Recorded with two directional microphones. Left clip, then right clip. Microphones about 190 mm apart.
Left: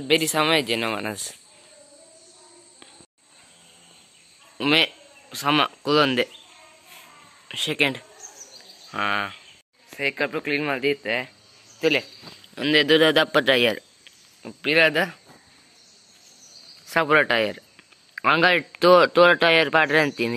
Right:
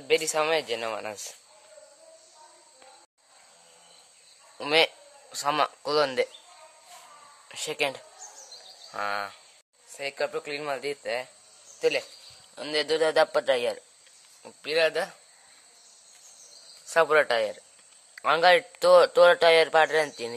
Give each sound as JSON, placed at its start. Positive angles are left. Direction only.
{"t": 0.1, "sound": "a man's voice", "side_deg": 0}
{"t": 4.6, "sound": "a man's voice", "side_deg": -5}
{"t": 7.4, "sound": "a man's voice", "side_deg": -5}
{"t": 12.5, "sound": "a man's voice", "side_deg": 5}
{"t": 16.8, "sound": "a man's voice", "side_deg": -5}